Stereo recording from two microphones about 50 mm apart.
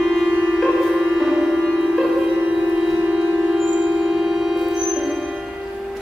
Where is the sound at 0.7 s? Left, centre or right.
Centre.